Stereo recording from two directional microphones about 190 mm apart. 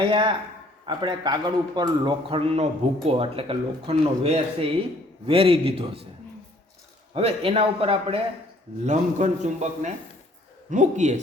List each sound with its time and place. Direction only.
0.0 s speech: 25° right (ahead or behind)
7.1 s a man's voice: 30° right (ahead or behind)